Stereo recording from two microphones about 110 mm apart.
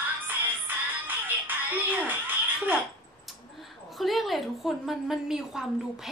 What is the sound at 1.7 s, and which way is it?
Speech, 15° right (ahead or behind).